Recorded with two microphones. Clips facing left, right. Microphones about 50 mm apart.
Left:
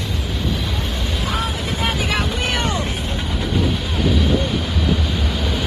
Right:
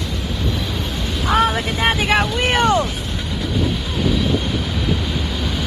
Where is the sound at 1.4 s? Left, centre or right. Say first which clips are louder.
Right 9 dB; right.